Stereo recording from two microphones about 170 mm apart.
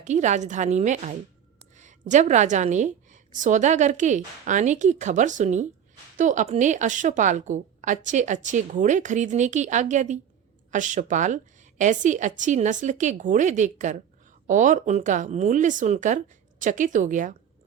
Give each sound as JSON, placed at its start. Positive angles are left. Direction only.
{"t": 0.0, "sound": "a woman's voice", "side_deg": -45}